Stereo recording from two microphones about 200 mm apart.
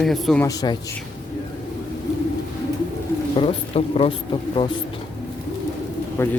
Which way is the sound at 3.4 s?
30° left (ahead or behind).